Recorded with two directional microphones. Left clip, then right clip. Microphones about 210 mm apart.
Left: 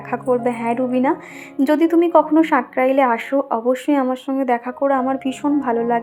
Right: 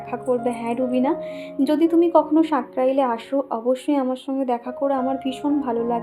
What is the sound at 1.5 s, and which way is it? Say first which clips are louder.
A woman's voice: left 3 dB; 10° left (ahead or behind).